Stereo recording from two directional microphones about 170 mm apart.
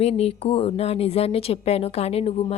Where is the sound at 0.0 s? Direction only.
35° left (ahead or behind).